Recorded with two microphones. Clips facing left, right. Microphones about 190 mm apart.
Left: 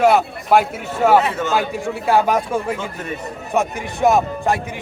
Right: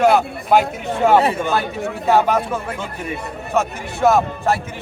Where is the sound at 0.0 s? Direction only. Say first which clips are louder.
Even; 5° left (ahead or behind).